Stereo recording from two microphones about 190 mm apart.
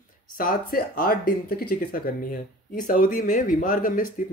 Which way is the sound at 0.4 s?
50° left (ahead or behind).